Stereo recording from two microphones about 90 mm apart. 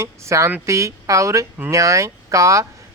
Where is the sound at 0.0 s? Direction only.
35° right (ahead or behind).